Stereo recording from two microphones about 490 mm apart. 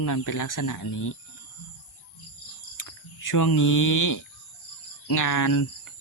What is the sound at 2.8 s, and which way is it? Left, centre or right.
Speech, left.